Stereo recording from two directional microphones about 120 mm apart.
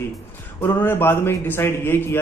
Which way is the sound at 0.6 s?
15° left (ahead or behind).